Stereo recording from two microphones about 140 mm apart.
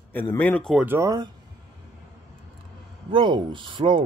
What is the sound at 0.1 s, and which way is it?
Speech, 15° left (ahead or behind).